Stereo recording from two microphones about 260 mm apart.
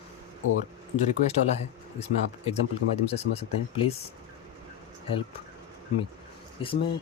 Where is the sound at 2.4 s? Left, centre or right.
Left.